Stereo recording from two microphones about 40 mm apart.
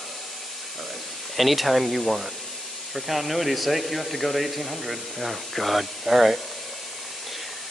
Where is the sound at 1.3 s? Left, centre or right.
Centre.